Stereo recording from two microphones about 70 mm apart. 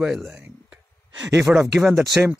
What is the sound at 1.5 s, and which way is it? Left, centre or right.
Speech, centre.